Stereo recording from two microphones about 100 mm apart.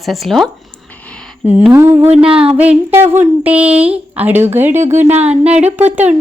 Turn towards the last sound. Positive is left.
turn(degrees=-15)  # may be behind; listen again after turning